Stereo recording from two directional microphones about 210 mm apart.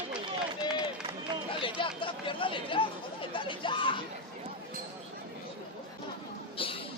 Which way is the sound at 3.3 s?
25° left (ahead or behind).